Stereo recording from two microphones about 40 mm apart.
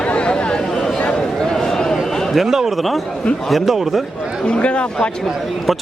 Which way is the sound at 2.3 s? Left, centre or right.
Centre.